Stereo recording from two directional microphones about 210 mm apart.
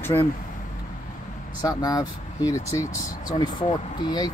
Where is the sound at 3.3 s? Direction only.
30° left (ahead or behind).